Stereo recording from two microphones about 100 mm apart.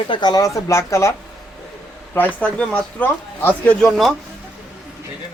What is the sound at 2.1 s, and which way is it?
Speech, 15° left (ahead or behind).